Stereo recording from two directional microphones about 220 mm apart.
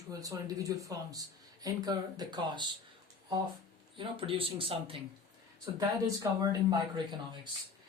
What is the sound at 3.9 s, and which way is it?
A man's voice, 25° right (ahead or behind).